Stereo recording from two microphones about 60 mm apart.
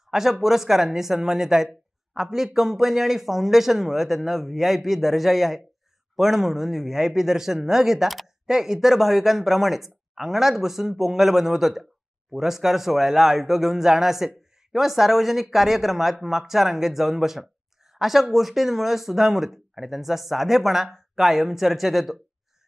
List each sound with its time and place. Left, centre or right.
0.1 s speech: centre